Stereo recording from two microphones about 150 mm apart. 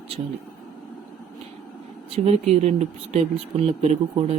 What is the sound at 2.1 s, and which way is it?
Speech, 45° right (ahead or behind).